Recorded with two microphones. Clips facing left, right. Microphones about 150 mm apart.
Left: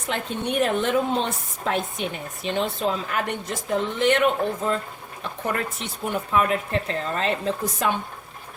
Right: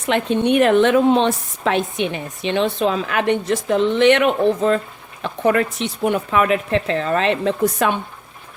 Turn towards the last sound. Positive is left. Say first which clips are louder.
# right 6 dB
turn(degrees=-65)  # may be behind; listen again after turning